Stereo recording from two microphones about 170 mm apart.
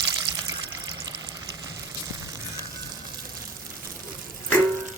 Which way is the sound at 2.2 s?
20° right (ahead or behind).